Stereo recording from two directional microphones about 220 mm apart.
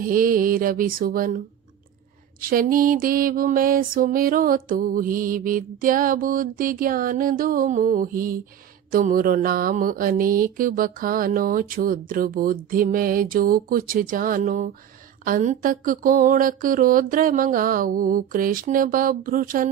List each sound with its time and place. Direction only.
0.0 s music: 40° right (ahead or behind)
2.5 s music: 40° right (ahead or behind)